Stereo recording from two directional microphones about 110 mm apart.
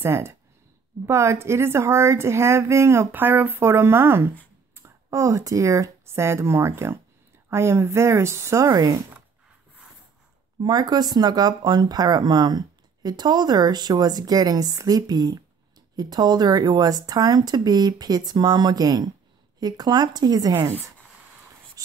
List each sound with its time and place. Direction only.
0.0 s speech: 20° right (ahead or behind)
10.6 s speech: 40° right (ahead or behind)
21.8 s a sound: 30° right (ahead or behind)